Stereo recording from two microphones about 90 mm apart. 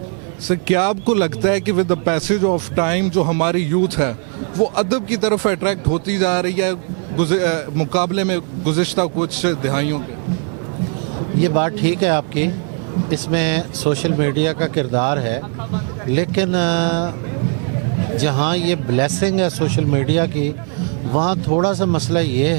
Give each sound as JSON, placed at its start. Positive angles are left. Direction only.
{"t": 0.4, "sound": "a man's voice", "side_deg": -15}
{"t": 11.3, "sound": "a man's voice", "side_deg": -15}
{"t": 18.2, "sound": "a man's voice", "side_deg": -15}